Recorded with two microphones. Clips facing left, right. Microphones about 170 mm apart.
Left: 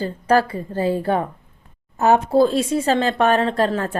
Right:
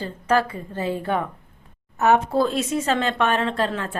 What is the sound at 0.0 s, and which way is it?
A woman's voice, 35° left (ahead or behind).